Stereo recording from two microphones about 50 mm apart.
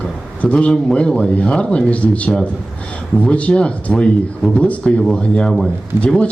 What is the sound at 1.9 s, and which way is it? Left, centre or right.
Speech, left.